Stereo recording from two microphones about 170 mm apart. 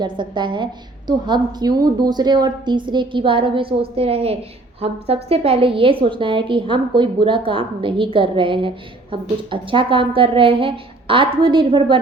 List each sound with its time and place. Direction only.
0.0 s a woman's voice: 25° right (ahead or behind)